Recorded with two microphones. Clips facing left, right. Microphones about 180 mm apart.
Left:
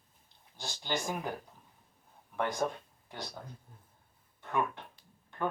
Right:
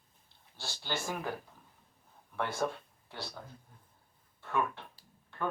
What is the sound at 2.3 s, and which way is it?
Speech, 15° left (ahead or behind).